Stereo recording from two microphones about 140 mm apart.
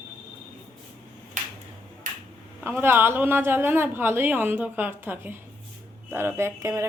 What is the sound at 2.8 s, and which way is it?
Speech, 15° right (ahead or behind).